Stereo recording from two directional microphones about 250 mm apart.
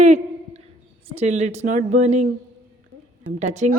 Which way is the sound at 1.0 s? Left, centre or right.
Right.